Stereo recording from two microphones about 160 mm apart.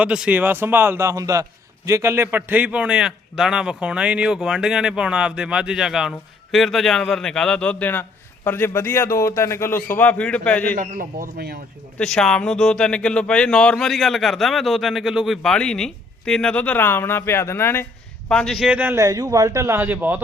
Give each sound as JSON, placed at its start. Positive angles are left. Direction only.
{"t": 0.0, "sound": "a man's voice", "side_deg": -5}
{"t": 10.8, "sound": "speech", "side_deg": -60}
{"t": 11.9, "sound": "a man's voice", "side_deg": 5}
{"t": 18.3, "sound": "a man's voice", "side_deg": 5}